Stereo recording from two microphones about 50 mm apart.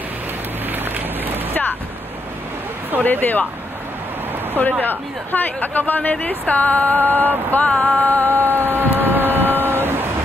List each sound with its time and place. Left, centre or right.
1.5 s a sound: left
3.0 s a woman's voice: left
4.8 s a woman's voice: left
7.6 s a woman's voice: left
8.5 s vehicle: right
9.0 s printer: right